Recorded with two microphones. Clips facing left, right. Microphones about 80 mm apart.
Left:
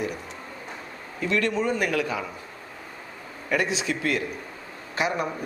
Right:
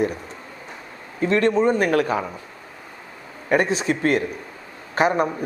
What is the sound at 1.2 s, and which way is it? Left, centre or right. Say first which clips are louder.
Speech: right 7 dB; right.